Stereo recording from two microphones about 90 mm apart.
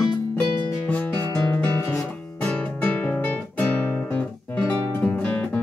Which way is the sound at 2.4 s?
15° left (ahead or behind).